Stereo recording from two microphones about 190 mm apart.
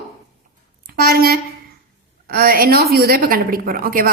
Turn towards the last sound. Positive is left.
turn(degrees=-50)  # may be behind; listen again after turning